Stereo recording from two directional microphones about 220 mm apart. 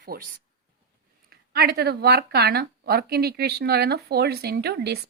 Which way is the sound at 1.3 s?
45° right (ahead or behind).